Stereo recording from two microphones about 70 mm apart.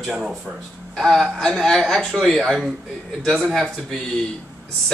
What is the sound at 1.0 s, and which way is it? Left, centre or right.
A man's voice, centre.